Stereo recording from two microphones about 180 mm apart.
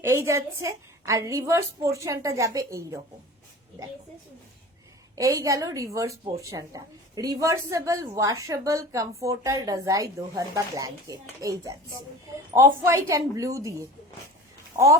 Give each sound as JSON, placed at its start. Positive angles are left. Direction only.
{"t": 0.0, "sound": "a woman's voice", "side_deg": -15}
{"t": 5.1, "sound": "a woman's voice", "side_deg": -20}